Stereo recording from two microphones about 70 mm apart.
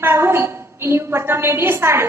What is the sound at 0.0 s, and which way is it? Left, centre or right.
A woman's voice, right.